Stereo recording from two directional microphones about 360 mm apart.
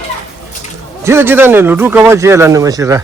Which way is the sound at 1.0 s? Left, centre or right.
Centre.